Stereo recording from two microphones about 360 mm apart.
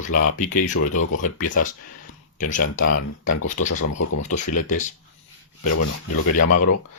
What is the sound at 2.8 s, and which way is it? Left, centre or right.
Speech, left.